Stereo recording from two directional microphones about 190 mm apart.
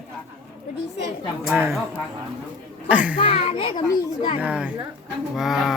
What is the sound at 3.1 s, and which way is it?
Speech, 30° left (ahead or behind).